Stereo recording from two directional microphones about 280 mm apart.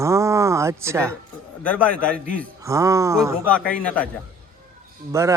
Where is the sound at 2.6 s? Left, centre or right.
Centre.